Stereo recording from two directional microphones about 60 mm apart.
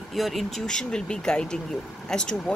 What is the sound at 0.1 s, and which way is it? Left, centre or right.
Speech, centre.